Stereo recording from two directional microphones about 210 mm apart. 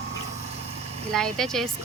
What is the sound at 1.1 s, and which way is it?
Speech, centre (ahead or behind).